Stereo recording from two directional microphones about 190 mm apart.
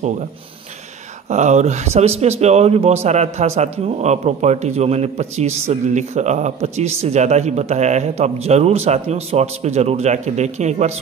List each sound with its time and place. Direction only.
1.3 s a man's voice: 40° right (ahead or behind)